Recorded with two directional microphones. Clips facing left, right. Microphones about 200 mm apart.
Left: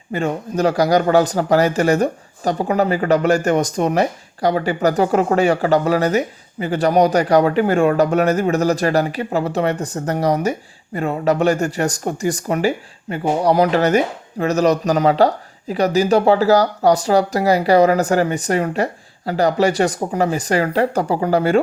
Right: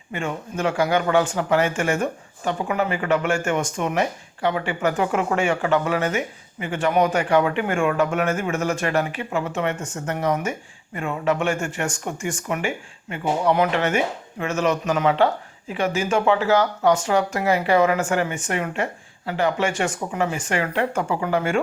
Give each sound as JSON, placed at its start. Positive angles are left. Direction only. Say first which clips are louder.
{"t": 0.1, "sound": "a man's voice", "louder": "left 7 dB", "side_deg": 40}